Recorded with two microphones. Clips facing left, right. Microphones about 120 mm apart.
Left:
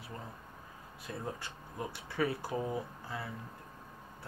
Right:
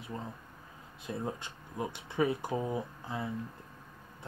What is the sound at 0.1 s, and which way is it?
Speech, 20° right (ahead or behind).